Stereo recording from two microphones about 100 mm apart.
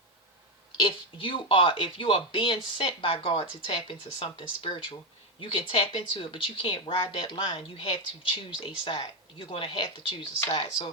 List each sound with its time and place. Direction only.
0.8 s speech: 60° left (ahead or behind)